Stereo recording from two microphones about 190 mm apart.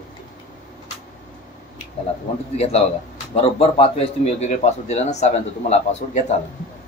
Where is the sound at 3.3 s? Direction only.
30° left (ahead or behind).